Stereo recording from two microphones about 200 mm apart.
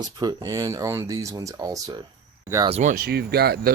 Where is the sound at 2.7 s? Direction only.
40° right (ahead or behind).